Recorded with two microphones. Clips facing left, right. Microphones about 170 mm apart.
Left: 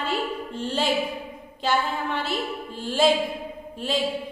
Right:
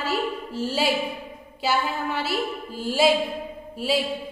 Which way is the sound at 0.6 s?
5° right (ahead or behind).